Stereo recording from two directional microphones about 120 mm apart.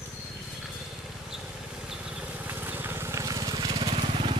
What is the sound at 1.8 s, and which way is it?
Vehicle, 5° right (ahead or behind).